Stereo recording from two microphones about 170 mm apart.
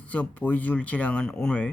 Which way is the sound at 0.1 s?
10° left (ahead or behind).